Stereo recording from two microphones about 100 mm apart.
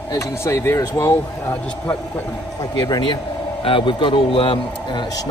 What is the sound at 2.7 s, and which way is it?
Speech, 50° left (ahead or behind).